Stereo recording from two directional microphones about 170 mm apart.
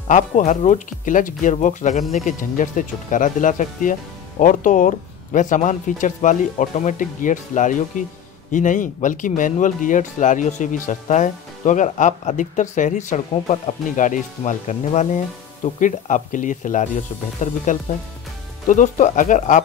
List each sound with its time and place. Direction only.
0.1 s speech: 45° left (ahead or behind)